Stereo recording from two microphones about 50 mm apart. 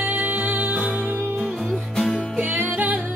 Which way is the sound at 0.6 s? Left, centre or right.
Centre.